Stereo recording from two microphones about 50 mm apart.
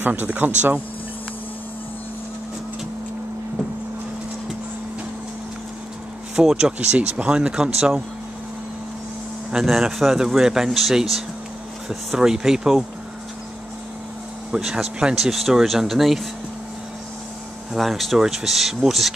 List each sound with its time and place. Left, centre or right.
0.0 s speech: right
6.3 s speech: centre
9.7 s speech: centre
14.5 s speech: centre
17.7 s speech: centre